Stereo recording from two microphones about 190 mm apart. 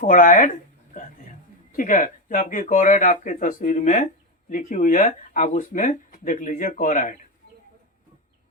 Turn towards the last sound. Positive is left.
turn(degrees=40)  # may be behind; listen again after turning